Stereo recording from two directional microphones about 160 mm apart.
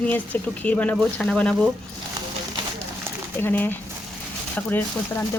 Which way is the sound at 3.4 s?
10° left (ahead or behind).